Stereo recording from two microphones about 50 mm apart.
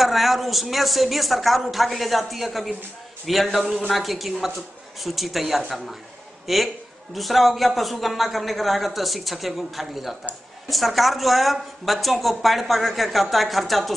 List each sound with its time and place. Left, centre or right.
0.0 s a woman's voice: centre